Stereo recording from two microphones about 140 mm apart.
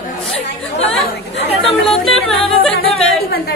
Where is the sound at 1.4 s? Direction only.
50° left (ahead or behind).